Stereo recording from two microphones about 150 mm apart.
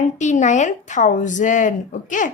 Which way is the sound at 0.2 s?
55° left (ahead or behind).